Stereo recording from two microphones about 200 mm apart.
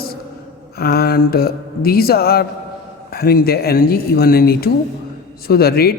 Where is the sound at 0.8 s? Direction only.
50° left (ahead or behind).